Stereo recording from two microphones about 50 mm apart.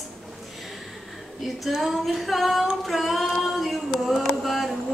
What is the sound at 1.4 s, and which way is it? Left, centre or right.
Speech, centre.